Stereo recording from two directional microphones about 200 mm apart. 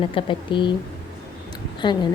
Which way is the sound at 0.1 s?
25° left (ahead or behind).